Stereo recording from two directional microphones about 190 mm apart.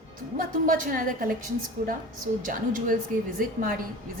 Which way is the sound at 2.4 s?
45° right (ahead or behind).